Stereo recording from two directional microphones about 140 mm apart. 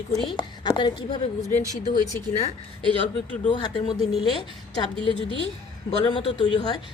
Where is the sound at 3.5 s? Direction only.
35° left (ahead or behind).